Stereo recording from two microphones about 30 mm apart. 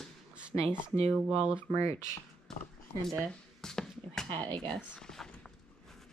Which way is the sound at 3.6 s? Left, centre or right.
Centre.